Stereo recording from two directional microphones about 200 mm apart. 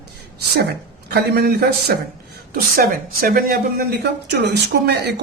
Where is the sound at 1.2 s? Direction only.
50° right (ahead or behind).